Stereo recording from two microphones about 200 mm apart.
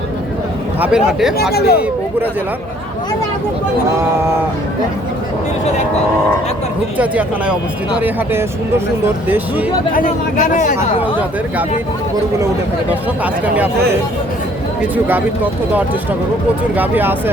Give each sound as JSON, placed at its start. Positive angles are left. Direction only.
{"t": 0.8, "sound": "speech", "side_deg": -5}
{"t": 1.5, "sound": "speech", "side_deg": 50}
{"t": 6.9, "sound": "speech", "side_deg": -5}
{"t": 9.9, "sound": "speech", "side_deg": 40}
{"t": 12.9, "sound": "speech", "side_deg": -5}
{"t": 14.8, "sound": "speech", "side_deg": -10}
{"t": 16.7, "sound": "speech", "side_deg": -10}